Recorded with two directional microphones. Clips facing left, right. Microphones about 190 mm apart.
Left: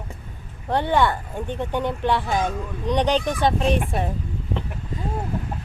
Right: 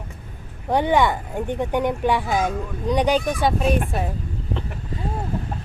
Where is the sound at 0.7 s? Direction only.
15° right (ahead or behind).